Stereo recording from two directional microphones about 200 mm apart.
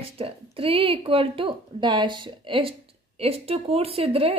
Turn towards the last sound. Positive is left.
turn(degrees=-30)  # may be behind; listen again after turning